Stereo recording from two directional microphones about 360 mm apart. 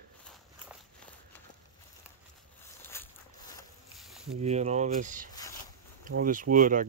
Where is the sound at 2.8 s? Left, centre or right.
Centre.